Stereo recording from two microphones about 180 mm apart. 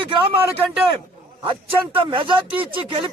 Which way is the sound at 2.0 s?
30° right (ahead or behind).